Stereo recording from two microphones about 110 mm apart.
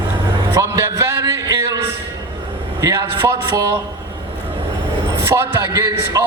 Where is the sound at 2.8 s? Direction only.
30° right (ahead or behind).